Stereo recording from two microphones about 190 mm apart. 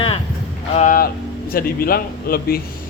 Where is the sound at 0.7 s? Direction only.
45° left (ahead or behind).